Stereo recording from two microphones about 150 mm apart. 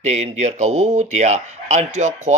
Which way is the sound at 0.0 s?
45° right (ahead or behind).